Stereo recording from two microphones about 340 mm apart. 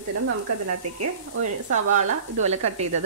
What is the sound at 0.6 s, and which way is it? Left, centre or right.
Sizzle, right.